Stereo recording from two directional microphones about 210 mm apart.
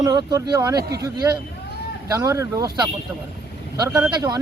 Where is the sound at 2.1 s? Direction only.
15° right (ahead or behind).